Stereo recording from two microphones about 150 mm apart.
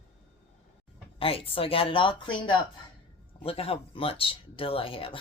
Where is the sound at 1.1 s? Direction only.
40° left (ahead or behind).